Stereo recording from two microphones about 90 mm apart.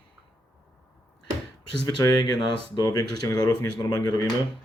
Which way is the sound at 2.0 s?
55° left (ahead or behind).